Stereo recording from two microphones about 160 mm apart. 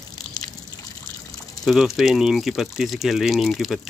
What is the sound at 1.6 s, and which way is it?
Speech, centre (ahead or behind).